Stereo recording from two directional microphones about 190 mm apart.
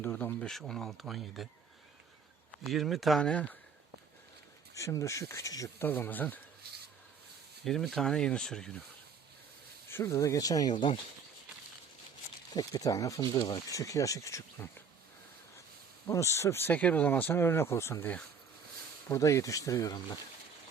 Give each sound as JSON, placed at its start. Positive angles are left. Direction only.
{"t": 0.0, "sound": "speech", "side_deg": 10}
{"t": 2.6, "sound": "speech", "side_deg": 0}
{"t": 4.7, "sound": "speech", "side_deg": 15}
{"t": 7.6, "sound": "speech", "side_deg": 0}
{"t": 9.9, "sound": "speech", "side_deg": 15}
{"t": 12.5, "sound": "speech", "side_deg": 15}
{"t": 16.0, "sound": "speech", "side_deg": 15}